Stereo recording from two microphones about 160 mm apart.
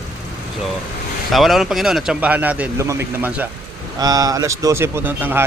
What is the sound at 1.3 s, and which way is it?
A man's voice, centre (ahead or behind).